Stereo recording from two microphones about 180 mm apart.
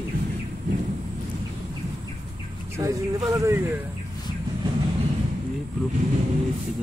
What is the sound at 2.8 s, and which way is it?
Speech, 15° right (ahead or behind).